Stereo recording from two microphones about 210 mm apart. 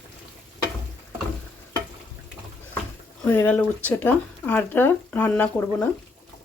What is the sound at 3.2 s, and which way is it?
Speech, 10° left (ahead or behind).